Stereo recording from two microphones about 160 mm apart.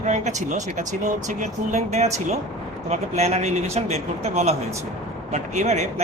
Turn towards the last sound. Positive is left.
turn(degrees=-45)  # may be behind; listen again after turning